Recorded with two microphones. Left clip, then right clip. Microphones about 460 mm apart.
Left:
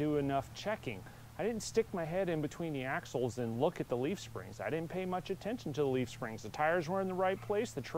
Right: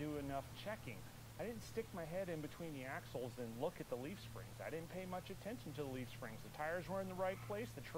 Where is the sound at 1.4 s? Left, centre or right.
Left.